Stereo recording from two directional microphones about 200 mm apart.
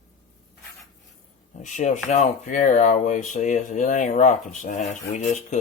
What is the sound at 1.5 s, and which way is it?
Speech, 35° left (ahead or behind).